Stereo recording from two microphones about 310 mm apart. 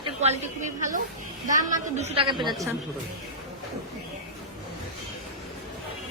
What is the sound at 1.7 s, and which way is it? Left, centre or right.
Speech, right.